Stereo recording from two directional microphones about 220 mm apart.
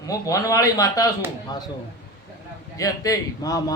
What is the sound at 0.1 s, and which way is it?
Speech, 15° left (ahead or behind).